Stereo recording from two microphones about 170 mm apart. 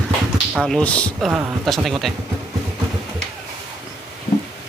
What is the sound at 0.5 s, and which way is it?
Speech, 5° left (ahead or behind).